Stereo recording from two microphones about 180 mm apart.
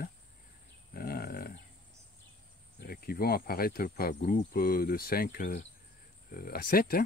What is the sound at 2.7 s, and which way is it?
Speech, 55° left (ahead or behind).